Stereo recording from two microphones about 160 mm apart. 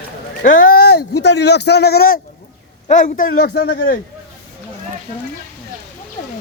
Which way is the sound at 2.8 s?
55° left (ahead or behind).